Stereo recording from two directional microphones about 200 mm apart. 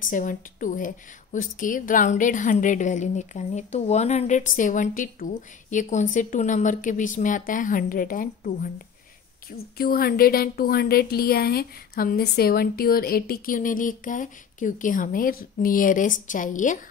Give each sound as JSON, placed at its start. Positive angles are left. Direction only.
{"t": 0.0, "sound": "a woman's voice", "side_deg": 40}